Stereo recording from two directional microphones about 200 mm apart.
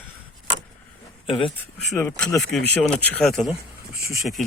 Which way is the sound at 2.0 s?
10° left (ahead or behind).